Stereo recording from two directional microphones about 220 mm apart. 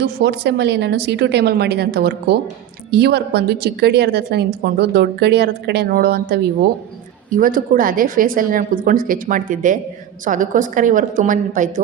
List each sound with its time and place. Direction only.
0.0 s a woman's voice: 50° right (ahead or behind)